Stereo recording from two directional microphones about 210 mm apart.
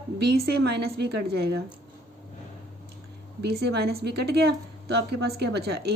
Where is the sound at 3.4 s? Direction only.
50° right (ahead or behind).